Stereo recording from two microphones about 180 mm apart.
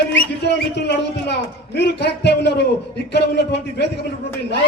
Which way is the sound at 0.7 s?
70° left (ahead or behind).